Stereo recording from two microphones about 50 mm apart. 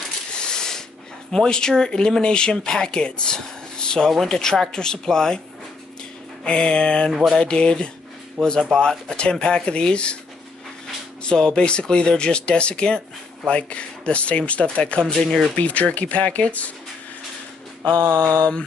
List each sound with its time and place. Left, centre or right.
0.3 s a sound: centre
1.3 s speech: centre
6.4 s speech: left
11.2 s speech: centre
18.0 s mantra: right